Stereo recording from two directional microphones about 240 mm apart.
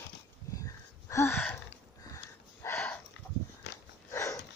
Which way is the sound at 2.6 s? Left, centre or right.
Centre.